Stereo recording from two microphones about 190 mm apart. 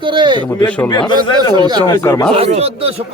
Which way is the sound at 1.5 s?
20° right (ahead or behind).